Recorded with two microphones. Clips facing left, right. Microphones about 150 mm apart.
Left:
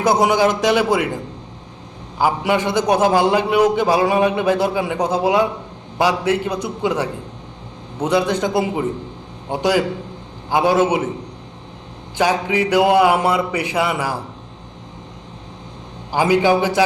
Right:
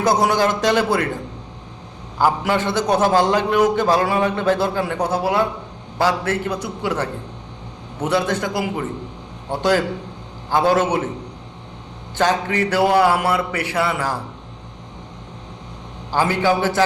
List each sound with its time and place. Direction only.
0.0 s a man's voice: 15° left (ahead or behind)
2.1 s a man's voice: 10° left (ahead or behind)
12.1 s a man's voice: 10° left (ahead or behind)
16.1 s a man's voice: 15° left (ahead or behind)